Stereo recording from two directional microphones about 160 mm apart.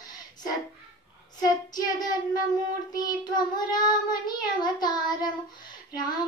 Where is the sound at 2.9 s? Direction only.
25° left (ahead or behind).